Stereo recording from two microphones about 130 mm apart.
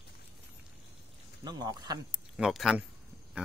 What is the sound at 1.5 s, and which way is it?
Speech, 30° right (ahead or behind).